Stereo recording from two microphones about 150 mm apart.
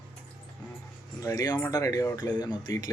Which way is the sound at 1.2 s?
25° left (ahead or behind).